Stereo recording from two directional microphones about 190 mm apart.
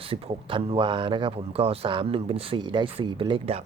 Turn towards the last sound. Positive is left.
turn(degrees=-30)  # may be behind; listen again after turning